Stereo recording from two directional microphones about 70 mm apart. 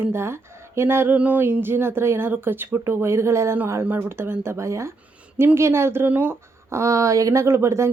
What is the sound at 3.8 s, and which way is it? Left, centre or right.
Speech, right.